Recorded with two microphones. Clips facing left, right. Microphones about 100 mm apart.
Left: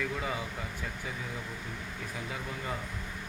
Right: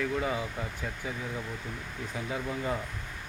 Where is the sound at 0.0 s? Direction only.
5° right (ahead or behind).